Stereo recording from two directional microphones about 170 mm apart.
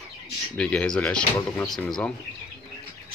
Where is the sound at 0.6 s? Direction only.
5° left (ahead or behind).